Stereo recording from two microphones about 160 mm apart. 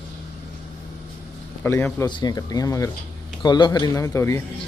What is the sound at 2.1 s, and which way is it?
Speech, 25° left (ahead or behind).